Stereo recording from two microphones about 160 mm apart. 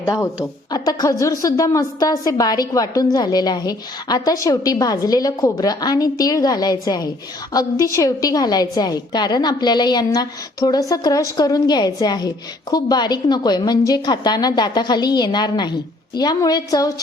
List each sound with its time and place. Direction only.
0.0 s a woman's voice: 15° left (ahead or behind)